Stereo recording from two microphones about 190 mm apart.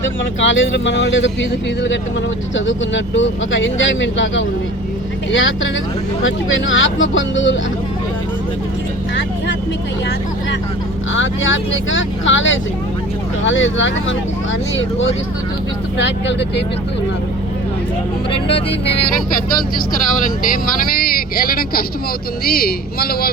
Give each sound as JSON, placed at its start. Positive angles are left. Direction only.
{"t": 0.3, "sound": "speech", "side_deg": 80}
{"t": 11.1, "sound": "speech", "side_deg": 85}
{"t": 16.0, "sound": "speech", "side_deg": 65}
{"t": 20.2, "sound": "speech", "side_deg": 45}